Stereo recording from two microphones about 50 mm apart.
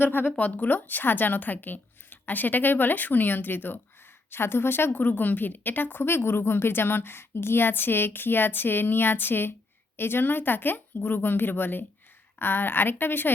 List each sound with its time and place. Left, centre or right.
0.0 s a woman's voice: left
0.3 s a woman's voice: left